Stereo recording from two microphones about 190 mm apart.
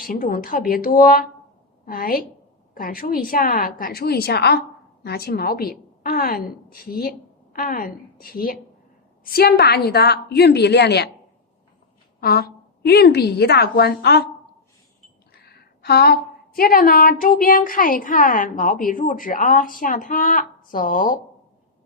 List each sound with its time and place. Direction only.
0.0 s a woman's voice: 50° left (ahead or behind)
12.2 s a woman's voice: 55° left (ahead or behind)
15.3 s a woman's voice: 55° left (ahead or behind)